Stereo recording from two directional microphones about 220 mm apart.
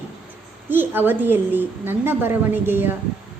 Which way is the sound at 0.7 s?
10° right (ahead or behind).